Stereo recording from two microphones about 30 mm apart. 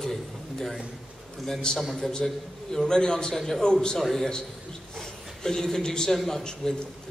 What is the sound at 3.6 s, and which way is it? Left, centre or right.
Speech, left.